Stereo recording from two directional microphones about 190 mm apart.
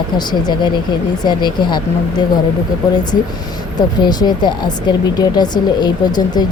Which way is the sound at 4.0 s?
20° left (ahead or behind).